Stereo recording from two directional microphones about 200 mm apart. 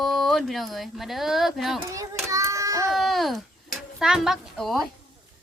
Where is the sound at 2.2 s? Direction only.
15° right (ahead or behind).